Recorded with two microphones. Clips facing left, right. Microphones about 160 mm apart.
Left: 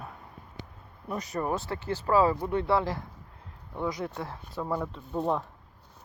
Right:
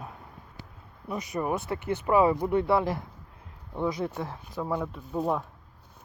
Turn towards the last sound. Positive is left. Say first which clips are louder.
# even
turn(degrees=-15)  # may be behind; listen again after turning